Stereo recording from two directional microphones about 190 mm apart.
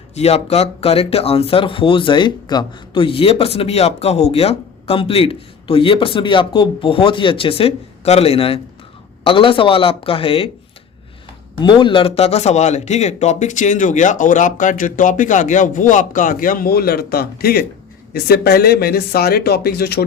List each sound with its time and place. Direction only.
0.1 s speech: 35° left (ahead or behind)
11.5 s a man's voice: 25° left (ahead or behind); by 20.1 s 55° left (ahead or behind)